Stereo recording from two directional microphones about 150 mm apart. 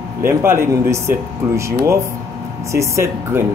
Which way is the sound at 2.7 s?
20° right (ahead or behind).